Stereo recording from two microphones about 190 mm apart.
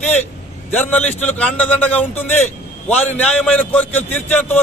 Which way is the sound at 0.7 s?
10° left (ahead or behind).